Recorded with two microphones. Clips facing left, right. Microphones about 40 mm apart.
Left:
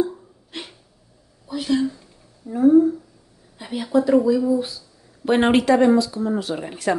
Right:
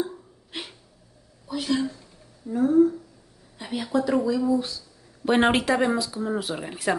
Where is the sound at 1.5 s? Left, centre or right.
Centre.